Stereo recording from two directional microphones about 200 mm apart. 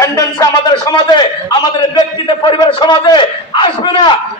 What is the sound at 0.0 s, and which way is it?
A man's voice, 15° left (ahead or behind).